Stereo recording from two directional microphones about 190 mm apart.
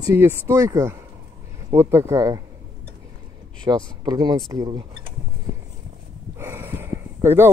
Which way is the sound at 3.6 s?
20° right (ahead or behind).